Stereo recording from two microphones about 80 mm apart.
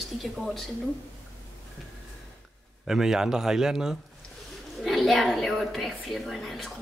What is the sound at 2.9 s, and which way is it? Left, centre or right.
A woman's voice, centre.